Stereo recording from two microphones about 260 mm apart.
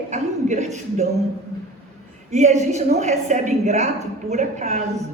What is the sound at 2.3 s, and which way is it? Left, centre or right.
A woman's voice, right.